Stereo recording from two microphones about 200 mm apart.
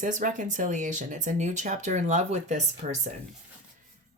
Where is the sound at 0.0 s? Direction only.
40° right (ahead or behind).